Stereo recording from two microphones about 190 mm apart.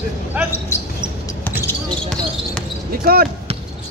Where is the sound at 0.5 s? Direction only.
15° left (ahead or behind).